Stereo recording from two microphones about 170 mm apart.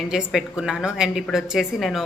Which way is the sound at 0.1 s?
5° right (ahead or behind).